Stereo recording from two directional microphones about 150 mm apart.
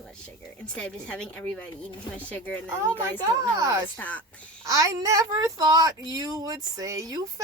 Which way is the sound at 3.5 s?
20° right (ahead or behind).